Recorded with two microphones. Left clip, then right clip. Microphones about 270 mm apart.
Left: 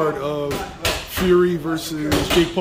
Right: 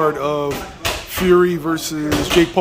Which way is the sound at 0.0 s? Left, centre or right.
Centre.